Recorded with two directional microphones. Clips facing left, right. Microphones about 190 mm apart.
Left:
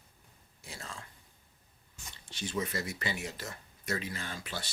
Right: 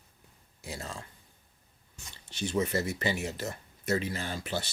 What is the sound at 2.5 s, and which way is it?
Speech, 25° right (ahead or behind).